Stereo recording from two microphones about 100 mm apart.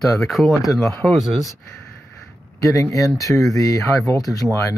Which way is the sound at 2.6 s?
35° left (ahead or behind).